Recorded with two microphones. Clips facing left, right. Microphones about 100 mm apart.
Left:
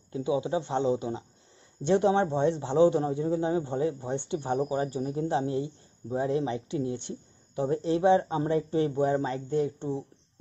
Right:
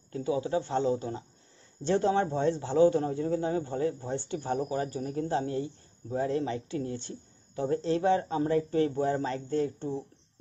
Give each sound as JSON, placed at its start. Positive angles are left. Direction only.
{"t": 0.1, "sound": "a man's voice", "side_deg": 20}